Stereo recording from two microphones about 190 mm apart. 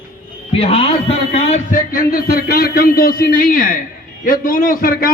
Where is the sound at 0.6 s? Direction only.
30° left (ahead or behind).